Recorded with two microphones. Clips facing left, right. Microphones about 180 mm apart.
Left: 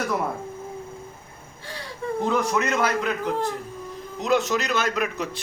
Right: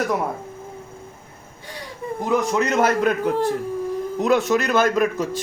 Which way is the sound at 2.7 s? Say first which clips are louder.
Right 5 dB; 45° right (ahead or behind).